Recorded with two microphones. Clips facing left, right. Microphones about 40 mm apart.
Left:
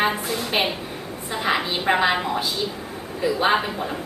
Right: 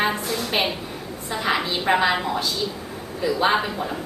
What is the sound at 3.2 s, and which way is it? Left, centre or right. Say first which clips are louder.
Speech: even; centre.